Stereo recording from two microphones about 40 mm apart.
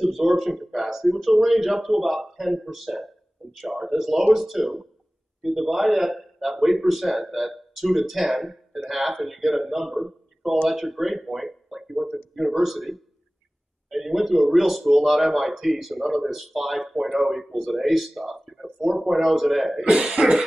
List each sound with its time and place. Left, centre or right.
0.0 s a man's voice: centre
19.8 s speech: right